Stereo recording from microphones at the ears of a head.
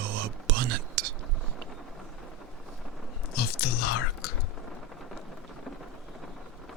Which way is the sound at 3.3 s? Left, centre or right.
Left.